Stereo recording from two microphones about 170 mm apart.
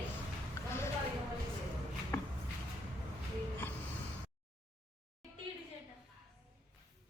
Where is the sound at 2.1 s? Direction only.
15° left (ahead or behind).